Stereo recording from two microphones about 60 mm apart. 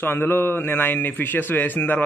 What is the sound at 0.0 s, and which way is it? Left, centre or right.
A man's voice, left.